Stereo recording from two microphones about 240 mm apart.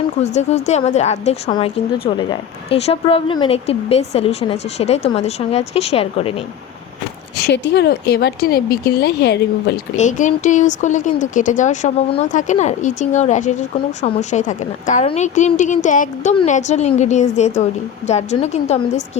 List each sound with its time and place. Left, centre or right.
0.2 s a woman's voice: left
7.3 s speech: left
10.0 s a woman's voice: left